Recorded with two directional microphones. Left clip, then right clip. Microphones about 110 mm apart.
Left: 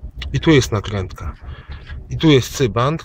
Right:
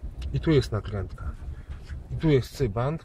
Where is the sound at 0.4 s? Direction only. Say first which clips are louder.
Left 10 dB; 25° left (ahead or behind).